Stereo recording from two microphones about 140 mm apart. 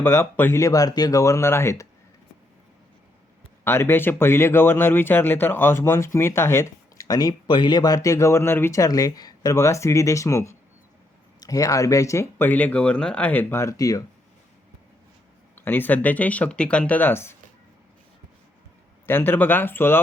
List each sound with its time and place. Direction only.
0.0 s speech: 15° left (ahead or behind)
3.6 s speech: 15° left (ahead or behind)
15.5 s speech: 15° left (ahead or behind)
19.0 s speech: 15° left (ahead or behind)